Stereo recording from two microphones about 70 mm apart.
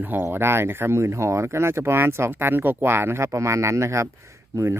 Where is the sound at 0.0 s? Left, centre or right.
Right.